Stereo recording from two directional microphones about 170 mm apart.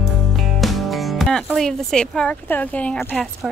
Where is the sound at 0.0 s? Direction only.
Centre (ahead or behind).